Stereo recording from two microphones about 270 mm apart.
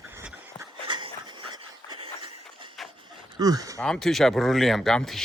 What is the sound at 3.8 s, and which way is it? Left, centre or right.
Speech, centre.